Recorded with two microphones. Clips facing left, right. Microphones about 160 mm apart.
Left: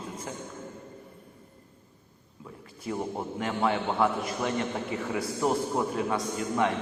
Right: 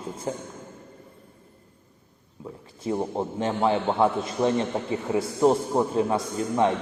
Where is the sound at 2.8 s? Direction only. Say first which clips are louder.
Right 5 dB; 25° right (ahead or behind).